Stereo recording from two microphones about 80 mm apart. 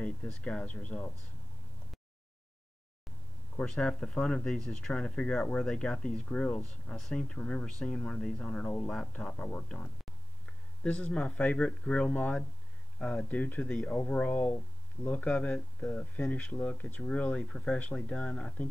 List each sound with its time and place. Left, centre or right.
0.0 s speech: centre
3.6 s speech: centre